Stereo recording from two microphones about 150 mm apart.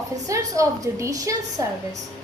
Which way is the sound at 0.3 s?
20° right (ahead or behind).